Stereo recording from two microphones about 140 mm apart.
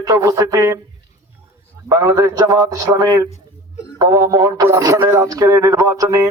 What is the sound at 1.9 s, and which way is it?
A man's voice, 25° right (ahead or behind).